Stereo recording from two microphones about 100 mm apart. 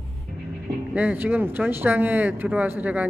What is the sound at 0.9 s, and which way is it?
Speech, 15° right (ahead or behind).